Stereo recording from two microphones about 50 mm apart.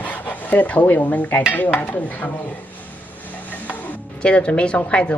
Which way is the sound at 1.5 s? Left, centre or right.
Left.